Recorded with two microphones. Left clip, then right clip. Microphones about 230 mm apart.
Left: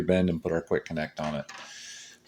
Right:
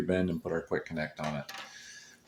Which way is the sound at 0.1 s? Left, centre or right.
Left.